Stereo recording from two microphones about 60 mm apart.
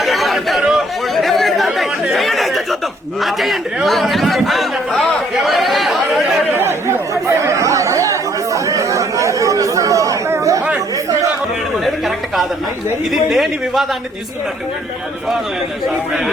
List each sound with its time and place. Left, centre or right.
0.0 s chatter: centre
3.2 s a man's voice: centre
3.8 s chatter: centre
6.6 s chatter: right
7.1 s chatter: right
13.1 s a man's voice: centre